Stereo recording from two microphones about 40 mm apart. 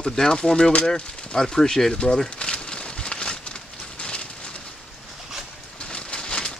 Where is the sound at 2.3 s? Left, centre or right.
Left.